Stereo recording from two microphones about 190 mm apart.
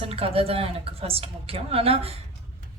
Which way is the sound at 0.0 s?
30° right (ahead or behind).